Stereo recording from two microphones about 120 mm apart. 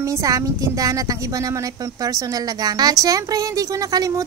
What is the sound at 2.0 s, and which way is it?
Speech, 30° right (ahead or behind).